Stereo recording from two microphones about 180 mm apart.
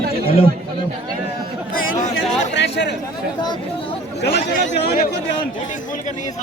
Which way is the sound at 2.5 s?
70° left (ahead or behind).